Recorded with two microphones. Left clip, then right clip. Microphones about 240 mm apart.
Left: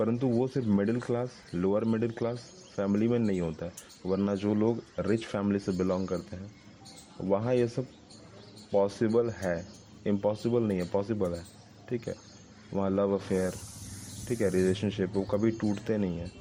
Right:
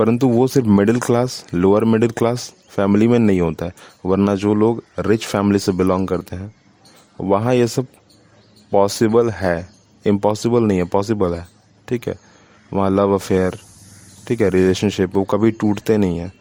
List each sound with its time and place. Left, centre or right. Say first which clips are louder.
0.0 s speech: right 13 dB; right